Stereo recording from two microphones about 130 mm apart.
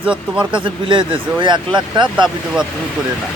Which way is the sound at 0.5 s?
40° right (ahead or behind).